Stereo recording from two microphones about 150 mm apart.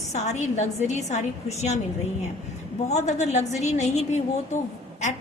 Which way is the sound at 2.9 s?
50° left (ahead or behind).